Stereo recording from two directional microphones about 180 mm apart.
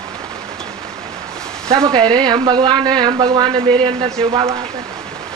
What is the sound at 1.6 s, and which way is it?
Speech, 25° right (ahead or behind).